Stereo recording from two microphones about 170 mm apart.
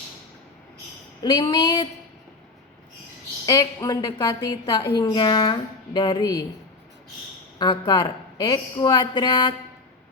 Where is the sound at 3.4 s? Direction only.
20° left (ahead or behind).